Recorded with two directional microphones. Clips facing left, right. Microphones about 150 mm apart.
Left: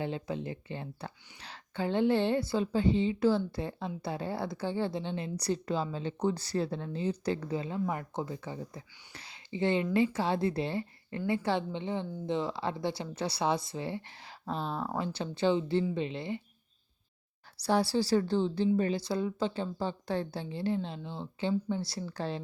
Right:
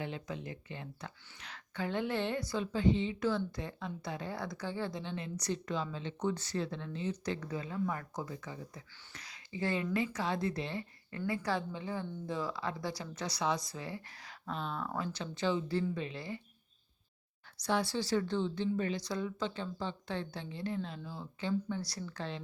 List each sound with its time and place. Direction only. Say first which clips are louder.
0.0 s a woman's voice: left 6 dB; 30° left (ahead or behind)
17.6 s speech: left 5 dB; 35° left (ahead or behind)